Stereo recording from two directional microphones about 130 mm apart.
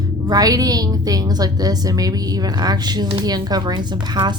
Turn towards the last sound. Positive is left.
turn(degrees=-35)  # may be behind; listen again after turning